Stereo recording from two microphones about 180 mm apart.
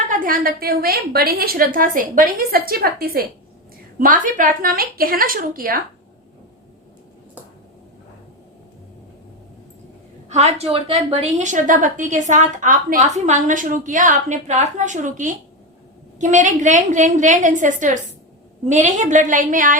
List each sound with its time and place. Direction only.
0.1 s a woman's voice: 50° right (ahead or behind)
10.2 s a woman's voice: 40° right (ahead or behind)